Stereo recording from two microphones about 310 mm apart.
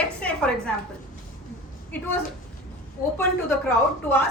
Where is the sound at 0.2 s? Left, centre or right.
Centre.